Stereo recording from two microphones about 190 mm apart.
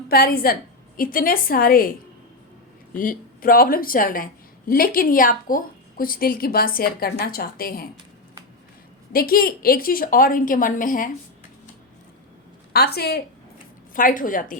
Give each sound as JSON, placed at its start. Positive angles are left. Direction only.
{"t": 0.1, "sound": "a woman's voice", "side_deg": 55}
{"t": 2.9, "sound": "a woman's voice", "side_deg": 45}
{"t": 9.1, "sound": "a woman's voice", "side_deg": 50}
{"t": 12.7, "sound": "a woman's voice", "side_deg": 55}
{"t": 13.9, "sound": "a woman's voice", "side_deg": 45}